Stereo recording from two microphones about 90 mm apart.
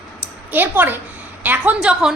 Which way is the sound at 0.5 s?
20° right (ahead or behind).